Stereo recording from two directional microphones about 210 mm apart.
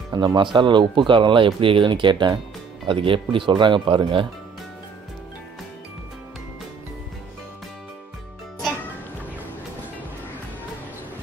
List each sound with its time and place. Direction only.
0.1 s speech: 20° right (ahead or behind)